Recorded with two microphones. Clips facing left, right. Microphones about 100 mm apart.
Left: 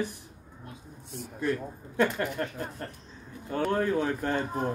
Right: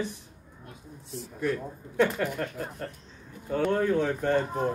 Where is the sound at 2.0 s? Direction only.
5° right (ahead or behind).